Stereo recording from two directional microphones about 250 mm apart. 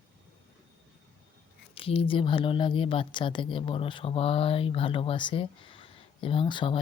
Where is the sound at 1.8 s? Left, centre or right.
Left.